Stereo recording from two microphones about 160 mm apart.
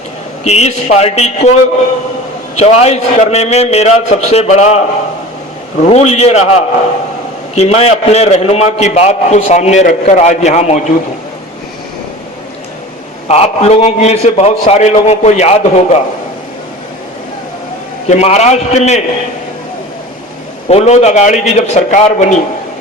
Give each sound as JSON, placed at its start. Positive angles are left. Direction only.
{"t": 0.4, "sound": "a man's voice", "side_deg": 40}
{"t": 2.6, "sound": "a man's voice", "side_deg": 40}
{"t": 5.8, "sound": "a man's voice", "side_deg": 40}
{"t": 7.5, "sound": "a man's voice", "side_deg": 40}
{"t": 13.2, "sound": "a man's voice", "side_deg": 40}
{"t": 18.1, "sound": "a man's voice", "side_deg": 40}
{"t": 20.7, "sound": "a man's voice", "side_deg": 40}